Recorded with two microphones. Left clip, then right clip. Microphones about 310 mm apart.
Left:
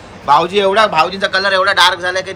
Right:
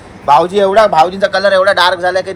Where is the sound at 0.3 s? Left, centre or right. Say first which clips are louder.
Right 2 dB; centre.